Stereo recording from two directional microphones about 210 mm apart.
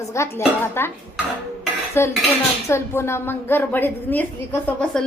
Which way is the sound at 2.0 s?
10° left (ahead or behind).